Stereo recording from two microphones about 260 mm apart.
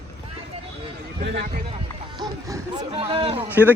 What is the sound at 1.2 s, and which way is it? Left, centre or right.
Speech, right.